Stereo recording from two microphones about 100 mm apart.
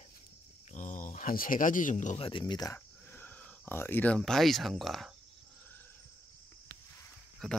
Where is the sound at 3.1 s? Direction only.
20° left (ahead or behind); by 5.1 s centre (ahead or behind).